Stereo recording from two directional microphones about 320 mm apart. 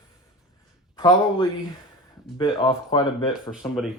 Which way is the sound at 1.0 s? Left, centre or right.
Centre.